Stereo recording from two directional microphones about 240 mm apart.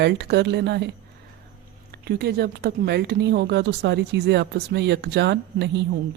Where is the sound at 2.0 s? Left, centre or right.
Right.